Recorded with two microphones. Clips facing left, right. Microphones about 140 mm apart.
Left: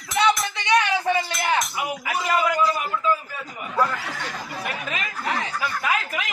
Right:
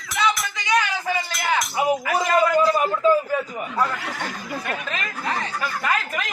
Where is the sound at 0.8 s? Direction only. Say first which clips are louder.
Left 4 dB; 25° left (ahead or behind).